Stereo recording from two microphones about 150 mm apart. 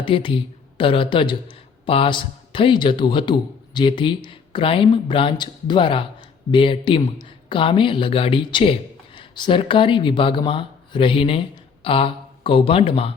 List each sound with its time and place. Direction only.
0.0 s a man's voice: 35° left (ahead or behind)